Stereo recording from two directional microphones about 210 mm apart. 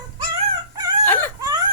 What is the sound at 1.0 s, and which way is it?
Whimper, 10° left (ahead or behind).